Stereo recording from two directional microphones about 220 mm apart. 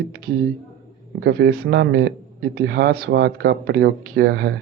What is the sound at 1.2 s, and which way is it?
Speech, 50° right (ahead or behind).